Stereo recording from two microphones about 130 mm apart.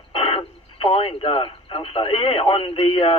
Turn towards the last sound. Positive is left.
turn(degrees=45)  # may be behind; listen again after turning